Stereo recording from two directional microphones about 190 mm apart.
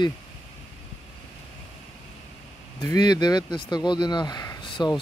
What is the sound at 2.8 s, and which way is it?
Speech, 20° left (ahead or behind).